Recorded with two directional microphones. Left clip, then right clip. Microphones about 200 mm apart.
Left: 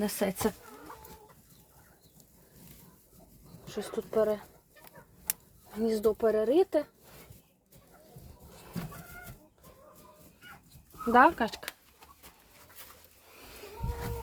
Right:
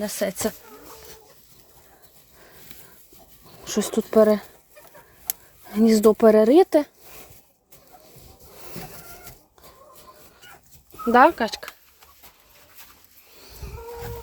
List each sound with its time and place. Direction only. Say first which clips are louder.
0.0 s speech: right 5 dB; 5° right (ahead or behind)
3.7 s speech: right 11 dB; 50° right (ahead or behind)
5.8 s speech: right 11 dB; 50° right (ahead or behind)
11.1 s speech: right 7 dB; 15° right (ahead or behind)